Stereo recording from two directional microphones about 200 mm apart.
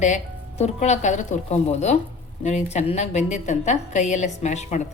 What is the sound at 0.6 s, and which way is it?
A woman's voice, 35° left (ahead or behind).